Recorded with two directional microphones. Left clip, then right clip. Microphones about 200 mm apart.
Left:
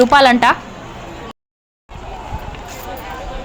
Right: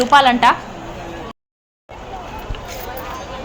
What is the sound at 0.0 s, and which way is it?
Speech, 25° left (ahead or behind).